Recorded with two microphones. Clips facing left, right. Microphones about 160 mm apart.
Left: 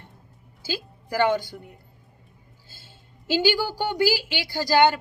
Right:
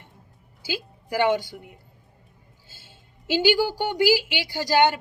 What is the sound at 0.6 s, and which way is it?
Speech, 15° right (ahead or behind).